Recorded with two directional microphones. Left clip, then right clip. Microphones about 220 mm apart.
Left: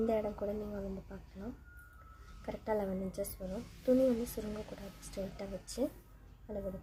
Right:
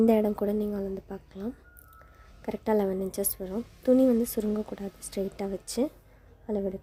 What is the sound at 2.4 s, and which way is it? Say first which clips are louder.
Speech: right 9 dB; 45° right (ahead or behind).